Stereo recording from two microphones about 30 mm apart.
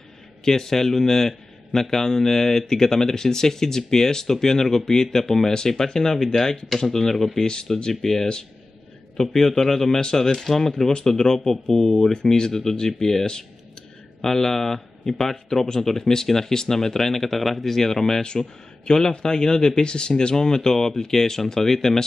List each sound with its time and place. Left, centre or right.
0.5 s a man's voice: centre